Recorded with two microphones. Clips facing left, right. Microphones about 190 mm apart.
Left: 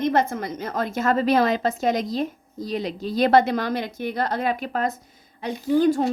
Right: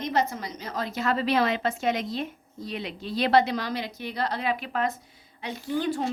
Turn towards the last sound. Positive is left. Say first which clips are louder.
# left 8 dB
turn(degrees=45)  # may be behind; listen again after turning